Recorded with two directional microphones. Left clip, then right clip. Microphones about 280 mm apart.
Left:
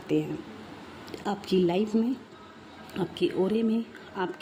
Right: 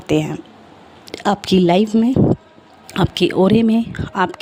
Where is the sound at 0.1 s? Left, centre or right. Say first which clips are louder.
Right 10 dB; right.